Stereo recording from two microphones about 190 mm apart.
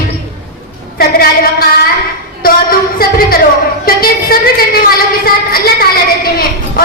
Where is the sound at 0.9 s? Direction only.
50° left (ahead or behind).